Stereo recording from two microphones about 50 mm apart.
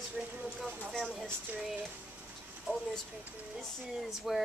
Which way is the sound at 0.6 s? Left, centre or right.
Centre.